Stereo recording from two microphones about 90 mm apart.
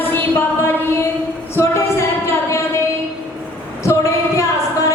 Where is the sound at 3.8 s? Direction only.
35° left (ahead or behind).